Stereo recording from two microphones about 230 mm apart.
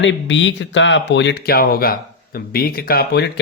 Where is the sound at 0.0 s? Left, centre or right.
Left.